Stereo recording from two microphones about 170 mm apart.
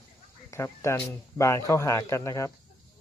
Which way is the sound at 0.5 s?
15° left (ahead or behind).